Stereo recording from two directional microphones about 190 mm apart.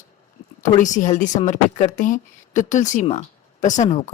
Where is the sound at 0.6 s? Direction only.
40° left (ahead or behind).